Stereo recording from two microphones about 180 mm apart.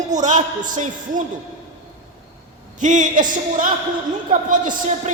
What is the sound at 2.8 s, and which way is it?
A man's voice, 45° right (ahead or behind).